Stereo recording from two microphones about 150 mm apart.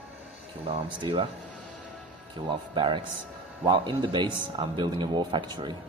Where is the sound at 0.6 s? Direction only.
40° right (ahead or behind).